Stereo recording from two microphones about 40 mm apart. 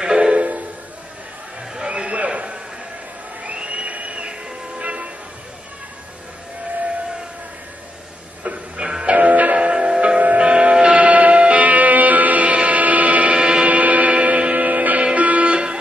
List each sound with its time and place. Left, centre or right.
0.0 s music: centre
1.8 s a sound: right
3.5 s crowd: right
3.9 s train: right
8.8 s music: centre
9.1 s music: right
9.6 s music: centre
10.1 s music: right
11.0 s music: right
13.4 s a sound: right
13.7 s music: right